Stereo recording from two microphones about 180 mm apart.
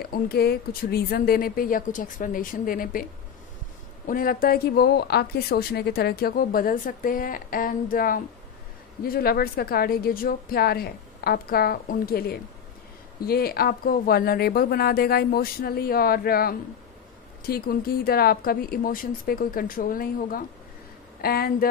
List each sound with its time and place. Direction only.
0.0 s a woman's voice: 60° left (ahead or behind)
4.1 s a woman's voice: 50° left (ahead or behind)